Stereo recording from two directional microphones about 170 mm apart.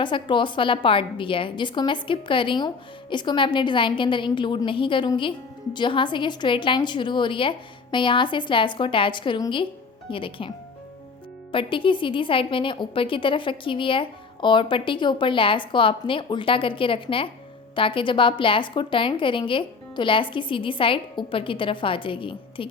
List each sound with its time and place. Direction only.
0.0 s a woman's voice: 30° left (ahead or behind)
11.5 s a woman's voice: 30° left (ahead or behind)